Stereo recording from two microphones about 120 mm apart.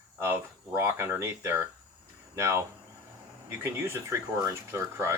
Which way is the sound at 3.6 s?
20° right (ahead or behind).